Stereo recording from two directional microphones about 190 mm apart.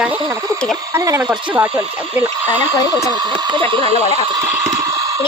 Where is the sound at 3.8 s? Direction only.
30° left (ahead or behind).